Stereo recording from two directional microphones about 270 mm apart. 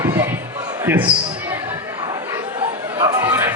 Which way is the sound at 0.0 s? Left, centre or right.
Centre.